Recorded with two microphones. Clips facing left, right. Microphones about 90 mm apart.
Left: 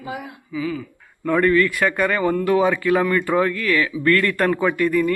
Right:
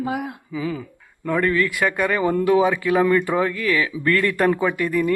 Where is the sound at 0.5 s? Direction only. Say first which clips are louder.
Left 2 dB; 25° right (ahead or behind).